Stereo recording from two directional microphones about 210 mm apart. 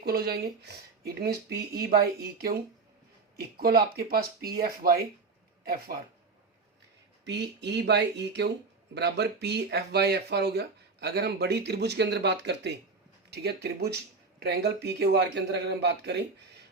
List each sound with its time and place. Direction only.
0.0 s speech: 45° right (ahead or behind)
7.3 s speech: 55° right (ahead or behind)